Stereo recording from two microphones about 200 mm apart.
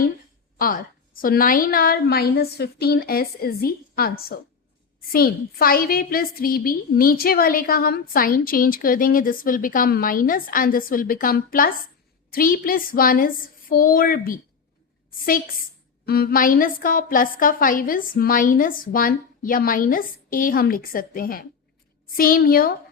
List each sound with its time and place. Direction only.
0.6 s a woman's voice: 45° left (ahead or behind)
16.0 s a woman's voice: 50° left (ahead or behind)